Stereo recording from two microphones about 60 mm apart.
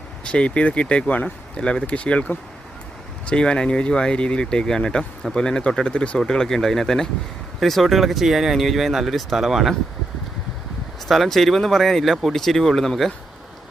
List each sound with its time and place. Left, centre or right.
0.3 s speech: left; by 9.7 s centre
11.1 s speech: centre